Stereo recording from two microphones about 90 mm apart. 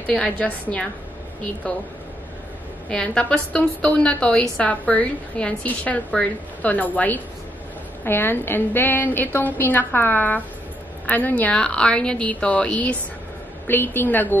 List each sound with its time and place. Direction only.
0.0 s a woman's voice: 15° left (ahead or behind)
2.9 s a woman's voice: 10° left (ahead or behind)